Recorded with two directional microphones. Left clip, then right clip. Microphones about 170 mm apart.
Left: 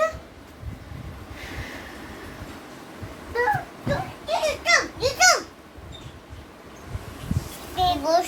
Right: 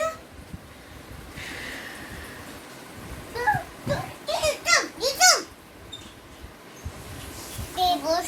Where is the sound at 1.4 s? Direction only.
10° left (ahead or behind).